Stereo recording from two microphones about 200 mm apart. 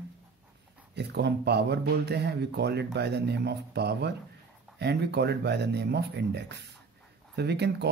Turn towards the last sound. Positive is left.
turn(degrees=-55)  # may be behind; listen again after turning